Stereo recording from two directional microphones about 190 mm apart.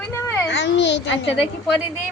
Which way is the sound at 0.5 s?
70° left (ahead or behind).